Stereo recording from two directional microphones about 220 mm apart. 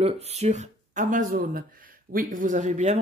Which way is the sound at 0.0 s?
30° right (ahead or behind).